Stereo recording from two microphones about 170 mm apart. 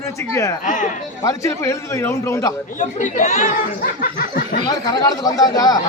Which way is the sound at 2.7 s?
50° left (ahead or behind).